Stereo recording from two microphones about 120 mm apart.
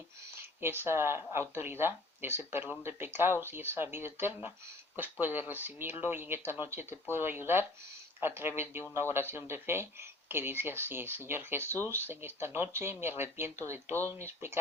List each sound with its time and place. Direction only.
0.6 s speech: 20° right (ahead or behind)